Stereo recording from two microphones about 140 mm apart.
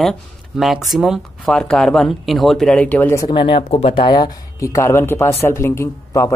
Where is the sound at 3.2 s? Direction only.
35° left (ahead or behind); by 6.3 s 20° left (ahead or behind).